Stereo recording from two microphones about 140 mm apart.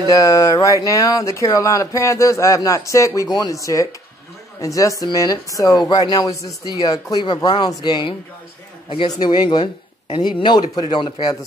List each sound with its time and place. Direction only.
0.1 s a man's voice: 25° left (ahead or behind)